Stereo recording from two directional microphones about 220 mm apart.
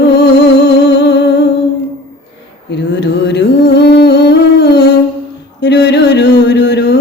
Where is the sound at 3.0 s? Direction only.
50° left (ahead or behind).